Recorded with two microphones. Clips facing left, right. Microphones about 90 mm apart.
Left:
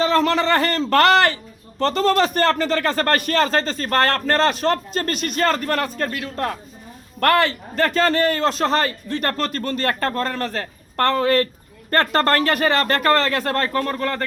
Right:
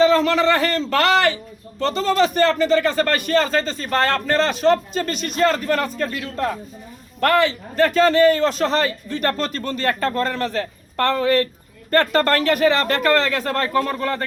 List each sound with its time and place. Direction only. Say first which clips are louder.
0.0 s speech: right 3 dB; 40° left (ahead or behind)